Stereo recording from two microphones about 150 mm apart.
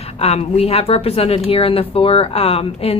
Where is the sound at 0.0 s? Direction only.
40° left (ahead or behind).